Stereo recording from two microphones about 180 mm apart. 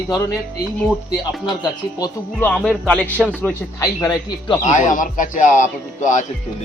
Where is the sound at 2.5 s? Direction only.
5° left (ahead or behind).